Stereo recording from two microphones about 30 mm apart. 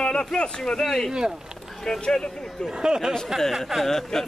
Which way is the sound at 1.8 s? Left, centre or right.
Left.